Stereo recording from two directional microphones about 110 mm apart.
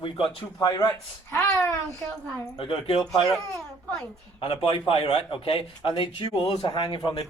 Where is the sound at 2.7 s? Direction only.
60° left (ahead or behind).